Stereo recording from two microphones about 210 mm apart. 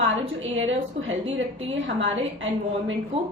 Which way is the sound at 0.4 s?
65° right (ahead or behind).